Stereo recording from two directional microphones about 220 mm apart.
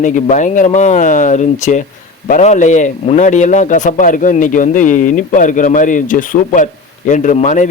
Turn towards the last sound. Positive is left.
turn(degrees=35)  # may be behind; listen again after turning